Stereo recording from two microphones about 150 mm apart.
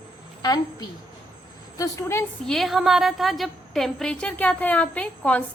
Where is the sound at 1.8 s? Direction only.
20° left (ahead or behind).